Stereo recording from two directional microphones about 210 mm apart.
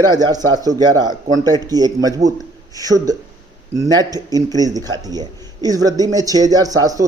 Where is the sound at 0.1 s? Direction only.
20° right (ahead or behind).